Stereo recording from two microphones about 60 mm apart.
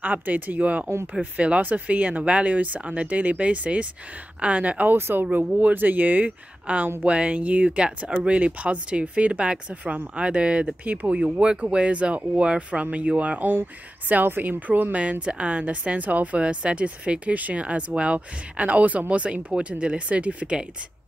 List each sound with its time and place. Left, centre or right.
0.0 s speech: right
4.9 s speech: right; by 20.6 s centre